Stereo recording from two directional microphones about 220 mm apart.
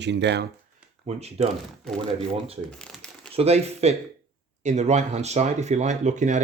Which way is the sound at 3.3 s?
30° right (ahead or behind).